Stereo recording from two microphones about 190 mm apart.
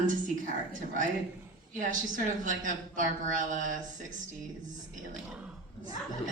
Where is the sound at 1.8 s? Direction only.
45° right (ahead or behind).